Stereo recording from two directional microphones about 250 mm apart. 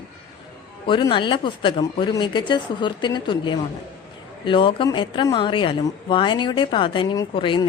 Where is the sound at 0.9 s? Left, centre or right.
Centre.